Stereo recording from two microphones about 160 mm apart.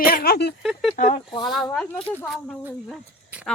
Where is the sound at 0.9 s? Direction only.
50° left (ahead or behind).